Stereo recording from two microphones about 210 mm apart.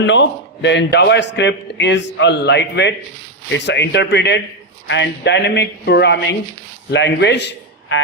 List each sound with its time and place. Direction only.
0.0 s a man's voice: 60° left (ahead or behind)